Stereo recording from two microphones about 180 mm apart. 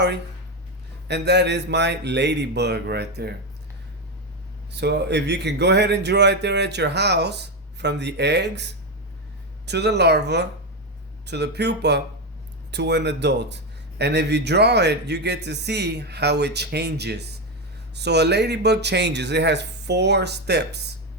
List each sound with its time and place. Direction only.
1.0 s speech: 70° right (ahead or behind)
4.7 s speech: 70° right (ahead or behind)